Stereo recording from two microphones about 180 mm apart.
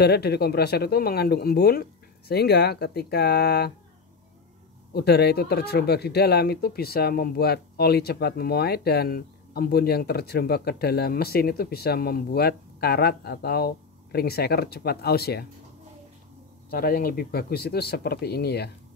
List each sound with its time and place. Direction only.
0.0 s speech: 65° left (ahead or behind)
4.9 s speech: 65° left (ahead or behind)
16.7 s speech: 55° left (ahead or behind)